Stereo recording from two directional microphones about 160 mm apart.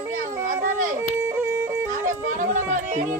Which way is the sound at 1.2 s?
15° right (ahead or behind).